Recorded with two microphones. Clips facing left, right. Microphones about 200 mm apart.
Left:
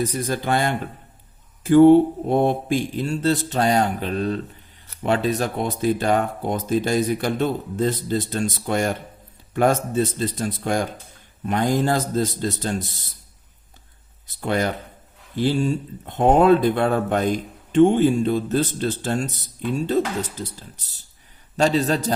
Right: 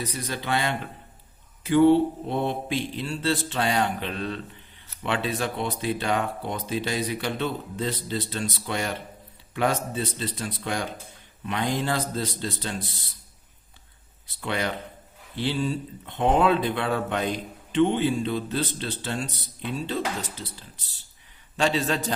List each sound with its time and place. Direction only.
0.0 s speech: 45° left (ahead or behind)
14.3 s a man's voice: 45° left (ahead or behind)